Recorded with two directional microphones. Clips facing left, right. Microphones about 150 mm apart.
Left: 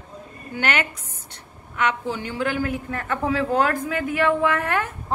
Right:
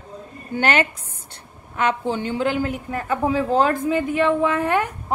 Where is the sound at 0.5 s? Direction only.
30° right (ahead or behind).